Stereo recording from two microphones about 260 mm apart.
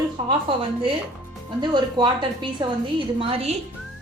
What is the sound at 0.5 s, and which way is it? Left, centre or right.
A woman's voice, centre.